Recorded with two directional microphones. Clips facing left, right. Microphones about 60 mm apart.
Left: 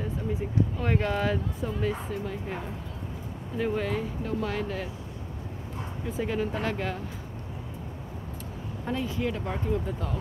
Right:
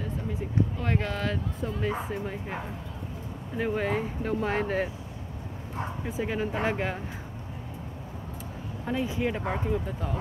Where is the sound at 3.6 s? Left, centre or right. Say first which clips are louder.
Right 1 dB; centre.